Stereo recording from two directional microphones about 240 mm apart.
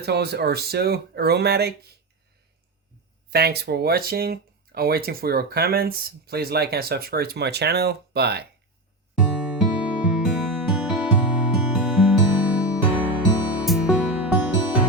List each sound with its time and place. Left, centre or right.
0.0 s speech: right
3.2 s speech: right
9.1 s music: centre